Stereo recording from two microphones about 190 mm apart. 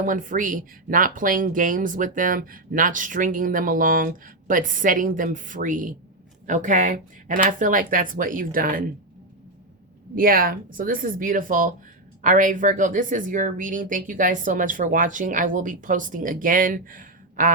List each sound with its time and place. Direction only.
0.0 s speech: 45° right (ahead or behind)
10.2 s speech: 50° right (ahead or behind)